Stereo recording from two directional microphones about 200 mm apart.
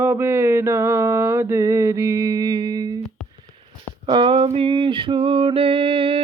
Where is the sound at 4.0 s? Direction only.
25° right (ahead or behind).